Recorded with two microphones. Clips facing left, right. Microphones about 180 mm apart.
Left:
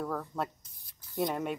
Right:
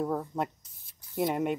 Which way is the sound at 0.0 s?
20° right (ahead or behind).